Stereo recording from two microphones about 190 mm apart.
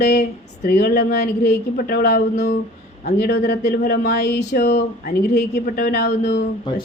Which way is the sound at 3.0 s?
50° left (ahead or behind).